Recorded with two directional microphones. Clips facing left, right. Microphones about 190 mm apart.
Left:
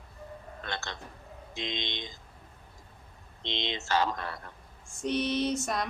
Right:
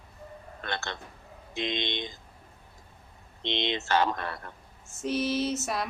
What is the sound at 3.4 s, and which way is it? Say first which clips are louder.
Speech: right 5 dB; 60° right (ahead or behind).